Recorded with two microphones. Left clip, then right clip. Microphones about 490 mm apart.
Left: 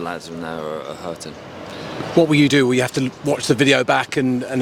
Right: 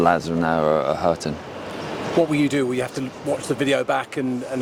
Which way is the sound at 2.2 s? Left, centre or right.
Left.